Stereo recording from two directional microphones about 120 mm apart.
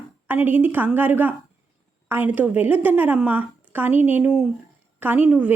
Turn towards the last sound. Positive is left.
turn(degrees=-10)  # may be behind; listen again after turning